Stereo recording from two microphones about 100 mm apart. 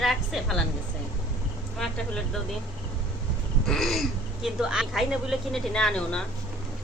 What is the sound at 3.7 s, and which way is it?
A woman's voice, centre (ahead or behind).